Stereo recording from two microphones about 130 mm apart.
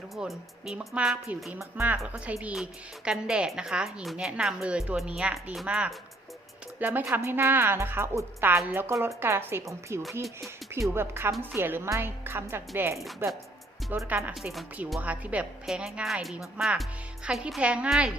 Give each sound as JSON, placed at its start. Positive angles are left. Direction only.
{"t": 0.2, "sound": "a woman's voice", "side_deg": -5}